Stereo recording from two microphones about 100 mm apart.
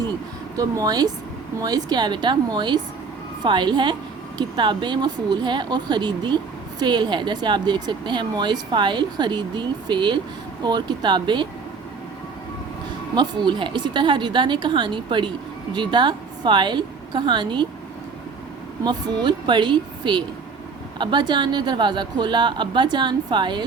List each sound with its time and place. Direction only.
0.5 s speech: 35° right (ahead or behind)
13.1 s a woman's voice: 50° right (ahead or behind)
18.9 s speech: 45° right (ahead or behind)